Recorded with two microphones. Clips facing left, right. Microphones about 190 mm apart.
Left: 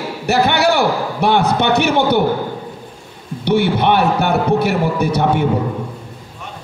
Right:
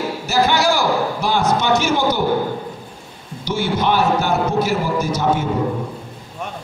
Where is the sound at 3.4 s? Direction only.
60° left (ahead or behind).